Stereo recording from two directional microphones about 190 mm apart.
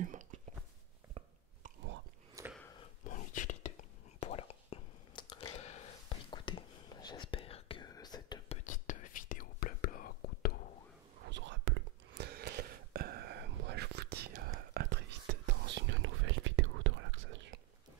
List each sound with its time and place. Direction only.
0.0 s whispering: 40° right (ahead or behind)
2.4 s a sound: 15° right (ahead or behind)
3.1 s whispering: 40° left (ahead or behind); by 8.5 s 20° left (ahead or behind)
8.6 s whispering: 45° left (ahead or behind)
11.2 s whispering: 70° right (ahead or behind)